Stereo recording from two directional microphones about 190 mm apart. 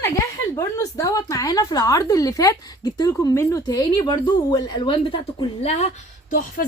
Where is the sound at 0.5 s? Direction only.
15° left (ahead or behind).